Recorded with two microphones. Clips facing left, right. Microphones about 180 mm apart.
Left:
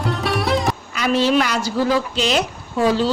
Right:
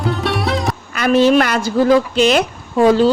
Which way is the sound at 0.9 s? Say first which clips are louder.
Right 6 dB; 55° right (ahead or behind).